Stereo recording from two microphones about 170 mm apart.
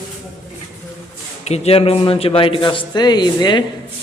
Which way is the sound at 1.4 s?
40° left (ahead or behind).